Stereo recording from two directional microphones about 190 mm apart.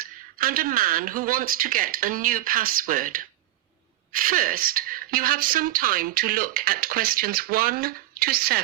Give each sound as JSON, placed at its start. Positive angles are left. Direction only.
{"t": 0.3, "sound": "speech", "side_deg": -50}